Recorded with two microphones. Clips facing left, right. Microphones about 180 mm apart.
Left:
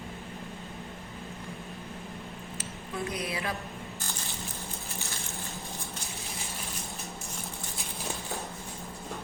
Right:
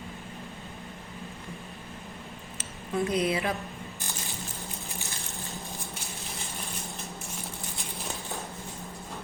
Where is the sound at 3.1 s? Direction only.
20° right (ahead or behind).